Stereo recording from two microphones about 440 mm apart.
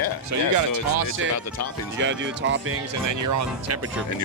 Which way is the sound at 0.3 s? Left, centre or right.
Right.